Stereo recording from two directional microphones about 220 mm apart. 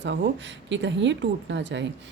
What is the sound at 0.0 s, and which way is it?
A woman's voice, 55° right (ahead or behind).